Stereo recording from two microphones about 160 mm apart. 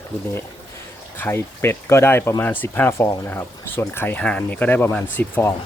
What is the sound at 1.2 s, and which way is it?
Speech, 15° left (ahead or behind).